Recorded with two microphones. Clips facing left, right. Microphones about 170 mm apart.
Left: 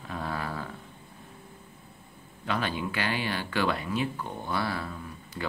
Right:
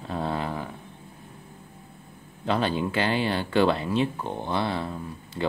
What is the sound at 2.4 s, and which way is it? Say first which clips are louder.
Speech: right 5 dB; 30° right (ahead or behind).